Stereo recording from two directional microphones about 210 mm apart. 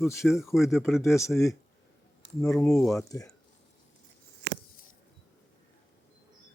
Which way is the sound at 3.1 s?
15° left (ahead or behind).